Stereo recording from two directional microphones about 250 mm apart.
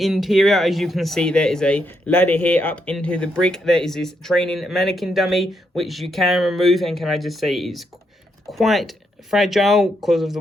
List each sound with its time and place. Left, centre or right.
0.0 s speech: centre